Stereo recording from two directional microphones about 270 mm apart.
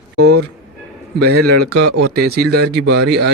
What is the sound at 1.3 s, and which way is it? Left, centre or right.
Speech, right.